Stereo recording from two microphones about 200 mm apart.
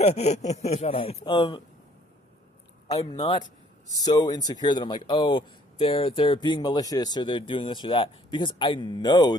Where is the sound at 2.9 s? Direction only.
20° left (ahead or behind).